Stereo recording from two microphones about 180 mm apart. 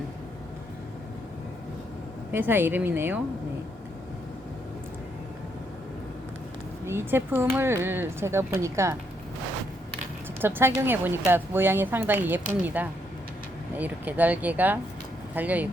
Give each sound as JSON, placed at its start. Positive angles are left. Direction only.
{"t": 2.3, "sound": "speech", "side_deg": -10}
{"t": 6.8, "sound": "speech", "side_deg": -15}
{"t": 10.4, "sound": "speech", "side_deg": -10}